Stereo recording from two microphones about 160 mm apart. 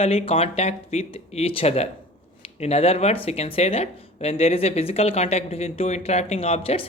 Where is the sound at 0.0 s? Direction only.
40° left (ahead or behind).